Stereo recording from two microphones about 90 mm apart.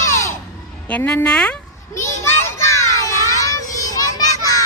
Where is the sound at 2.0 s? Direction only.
30° left (ahead or behind).